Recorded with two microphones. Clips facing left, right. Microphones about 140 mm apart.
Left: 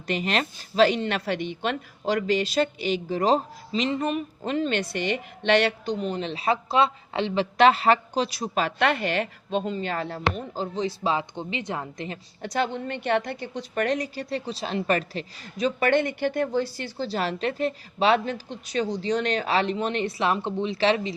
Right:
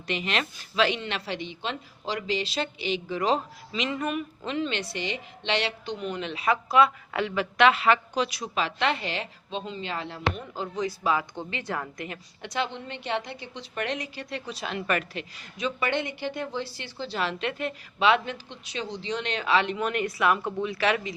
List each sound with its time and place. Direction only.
0.1 s a woman's voice: 40° left (ahead or behind)